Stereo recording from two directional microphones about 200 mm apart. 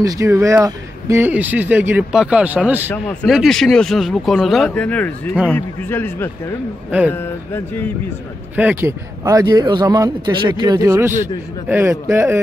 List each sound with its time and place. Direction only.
0.0 s speech: 15° right (ahead or behind)
2.9 s speech: 5° left (ahead or behind)
8.5 s a man's voice: 10° right (ahead or behind)